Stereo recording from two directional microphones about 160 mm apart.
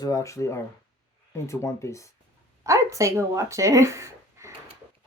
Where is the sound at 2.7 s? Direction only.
20° right (ahead or behind).